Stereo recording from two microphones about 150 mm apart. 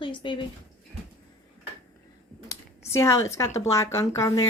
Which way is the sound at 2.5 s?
20° left (ahead or behind).